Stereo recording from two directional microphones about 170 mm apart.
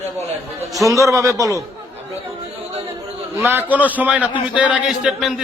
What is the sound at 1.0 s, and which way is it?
Speech, 15° right (ahead or behind).